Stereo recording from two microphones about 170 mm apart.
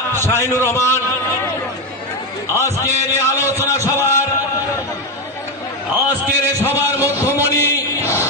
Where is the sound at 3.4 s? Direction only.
10° right (ahead or behind).